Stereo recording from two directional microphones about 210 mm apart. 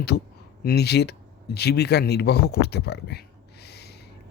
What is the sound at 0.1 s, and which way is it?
Speech, 50° left (ahead or behind).